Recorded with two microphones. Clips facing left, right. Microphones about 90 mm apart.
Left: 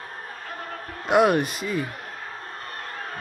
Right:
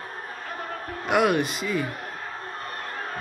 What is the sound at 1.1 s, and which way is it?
Speech, 35° left (ahead or behind).